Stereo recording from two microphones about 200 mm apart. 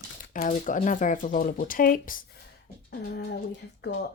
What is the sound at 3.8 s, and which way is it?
Speech, 55° left (ahead or behind).